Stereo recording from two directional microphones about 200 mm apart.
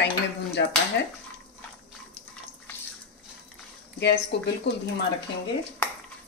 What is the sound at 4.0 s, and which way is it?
Speech, 60° left (ahead or behind).